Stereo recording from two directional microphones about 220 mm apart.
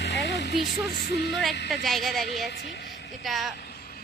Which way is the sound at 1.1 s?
50° left (ahead or behind).